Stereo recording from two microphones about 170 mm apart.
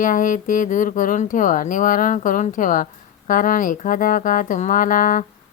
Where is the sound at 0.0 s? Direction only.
50° left (ahead or behind).